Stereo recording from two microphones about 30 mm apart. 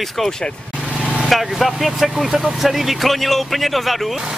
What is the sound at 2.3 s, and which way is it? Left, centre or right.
Speech, centre.